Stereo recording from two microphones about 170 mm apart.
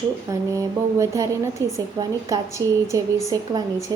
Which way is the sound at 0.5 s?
20° right (ahead or behind).